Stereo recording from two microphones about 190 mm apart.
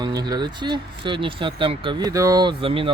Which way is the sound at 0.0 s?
20° right (ahead or behind).